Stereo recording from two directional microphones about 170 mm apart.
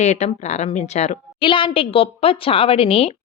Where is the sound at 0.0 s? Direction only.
40° left (ahead or behind).